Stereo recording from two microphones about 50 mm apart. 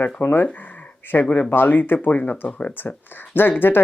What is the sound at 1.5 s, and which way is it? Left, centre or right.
Speech, left.